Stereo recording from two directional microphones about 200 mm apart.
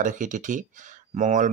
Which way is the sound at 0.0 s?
40° right (ahead or behind).